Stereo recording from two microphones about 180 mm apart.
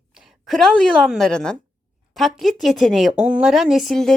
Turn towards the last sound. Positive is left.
turn(degrees=0)  # may be behind; listen again after turning